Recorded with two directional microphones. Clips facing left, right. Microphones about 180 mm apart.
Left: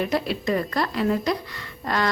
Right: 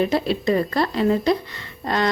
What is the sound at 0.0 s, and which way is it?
A woman's voice, 25° right (ahead or behind).